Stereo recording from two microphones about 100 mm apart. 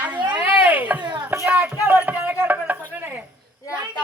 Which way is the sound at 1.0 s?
50° right (ahead or behind).